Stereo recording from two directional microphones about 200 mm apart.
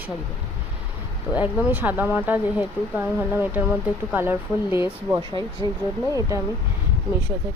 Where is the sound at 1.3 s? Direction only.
5° right (ahead or behind).